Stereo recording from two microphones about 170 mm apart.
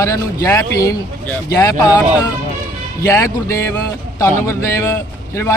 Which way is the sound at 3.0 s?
15° left (ahead or behind).